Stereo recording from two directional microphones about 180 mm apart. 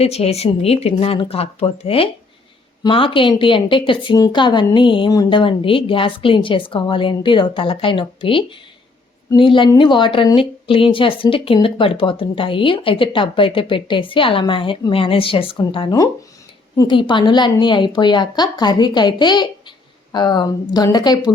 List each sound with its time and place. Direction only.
0.0 s speech: 35° left (ahead or behind)